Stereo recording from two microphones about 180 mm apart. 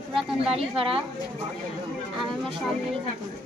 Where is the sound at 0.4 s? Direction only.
30° right (ahead or behind).